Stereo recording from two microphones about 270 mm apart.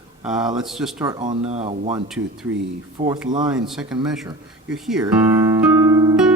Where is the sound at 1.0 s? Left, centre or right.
Centre.